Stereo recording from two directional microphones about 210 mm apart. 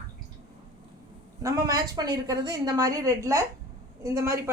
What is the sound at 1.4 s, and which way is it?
Speech, 15° right (ahead or behind).